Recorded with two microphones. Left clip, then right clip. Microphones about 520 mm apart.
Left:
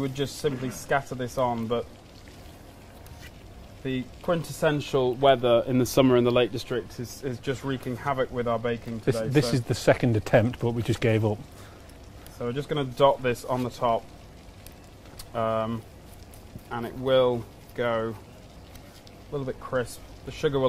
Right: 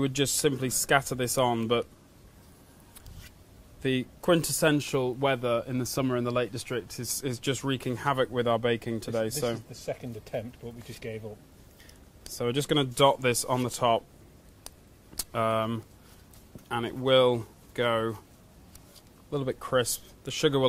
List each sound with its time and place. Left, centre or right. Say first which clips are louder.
0.0 s speech: right 2 dB; right
3.8 s speech: right 2 dB; right
7.0 s speech: even; right
9.3 s speech: left 7 dB; left
12.4 s speech: right 2 dB; right
15.1 s speech: left 1 dB; right
19.3 s speech: right 2 dB; right